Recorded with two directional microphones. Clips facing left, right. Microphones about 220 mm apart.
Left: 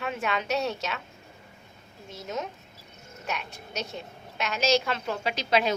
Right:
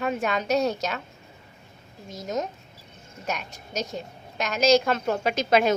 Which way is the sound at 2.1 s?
40° right (ahead or behind).